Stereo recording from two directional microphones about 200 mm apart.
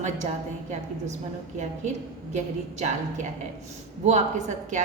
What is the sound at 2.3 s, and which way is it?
A woman's voice, 35° right (ahead or behind).